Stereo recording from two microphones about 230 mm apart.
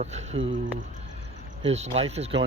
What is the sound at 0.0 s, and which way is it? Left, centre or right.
Speech, right.